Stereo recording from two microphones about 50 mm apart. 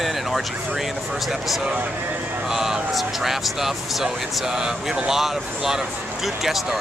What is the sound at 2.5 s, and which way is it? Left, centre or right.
Speech, centre.